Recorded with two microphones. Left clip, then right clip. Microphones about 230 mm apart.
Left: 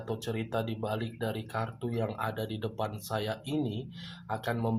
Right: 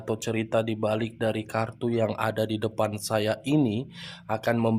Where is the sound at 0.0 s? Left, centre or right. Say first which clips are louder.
Right 6 dB; right.